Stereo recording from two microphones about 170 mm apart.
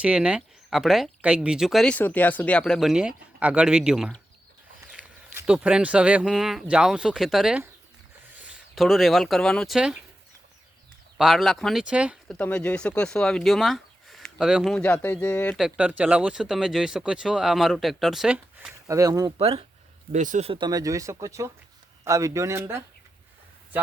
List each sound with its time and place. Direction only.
0.0 s speech: 5° right (ahead or behind)
11.2 s speech: centre (ahead or behind)
12.3 s speech: 5° left (ahead or behind)
15.6 s speech: 10° right (ahead or behind)
18.7 s speech: 20° right (ahead or behind)
19.4 s speech: 35° right (ahead or behind)
20.1 s speech: 45° right (ahead or behind)
20.5 s speech: 25° right (ahead or behind)